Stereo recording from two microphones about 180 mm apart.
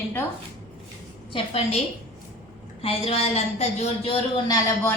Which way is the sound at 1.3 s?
30° left (ahead or behind).